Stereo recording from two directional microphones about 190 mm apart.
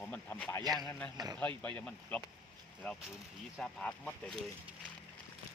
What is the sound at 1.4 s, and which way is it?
Speech, 10° left (ahead or behind).